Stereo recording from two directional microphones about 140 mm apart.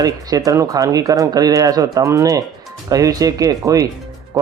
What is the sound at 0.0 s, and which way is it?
Speech, 25° right (ahead or behind).